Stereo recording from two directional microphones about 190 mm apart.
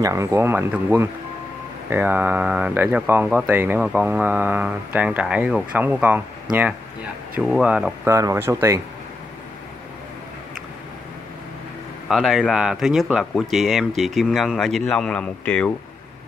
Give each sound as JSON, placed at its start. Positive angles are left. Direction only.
{"t": 0.0, "sound": "speech", "side_deg": -15}
{"t": 7.3, "sound": "speech", "side_deg": -5}
{"t": 12.1, "sound": "speech", "side_deg": 0}